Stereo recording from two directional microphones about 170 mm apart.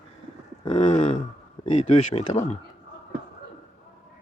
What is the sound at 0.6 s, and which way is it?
Speech, 45° left (ahead or behind).